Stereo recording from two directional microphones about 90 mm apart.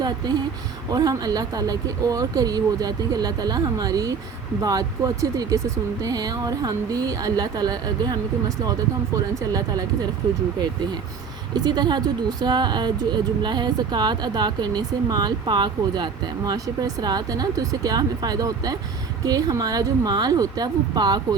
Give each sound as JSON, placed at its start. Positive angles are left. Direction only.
{"t": 0.0, "sound": "speech", "side_deg": -50}
{"t": 11.5, "sound": "speech", "side_deg": -50}